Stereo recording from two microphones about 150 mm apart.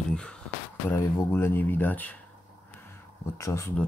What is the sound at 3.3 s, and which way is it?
Speech, 20° left (ahead or behind).